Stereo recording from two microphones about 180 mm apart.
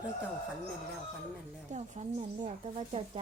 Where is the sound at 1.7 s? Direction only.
40° right (ahead or behind).